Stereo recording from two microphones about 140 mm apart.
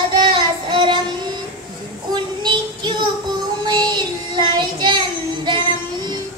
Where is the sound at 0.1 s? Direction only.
35° right (ahead or behind).